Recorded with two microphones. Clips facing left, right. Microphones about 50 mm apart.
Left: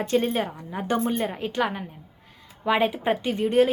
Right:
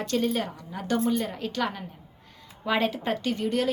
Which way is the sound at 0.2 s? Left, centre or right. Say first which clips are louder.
Left 2 dB; left.